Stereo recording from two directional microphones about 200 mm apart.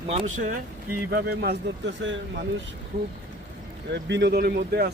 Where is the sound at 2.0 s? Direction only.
60° right (ahead or behind).